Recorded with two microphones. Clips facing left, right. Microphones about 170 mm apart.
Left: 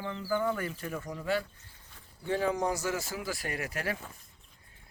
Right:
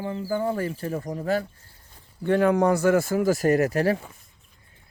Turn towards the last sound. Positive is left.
turn(degrees=-35)  # may be behind; listen again after turning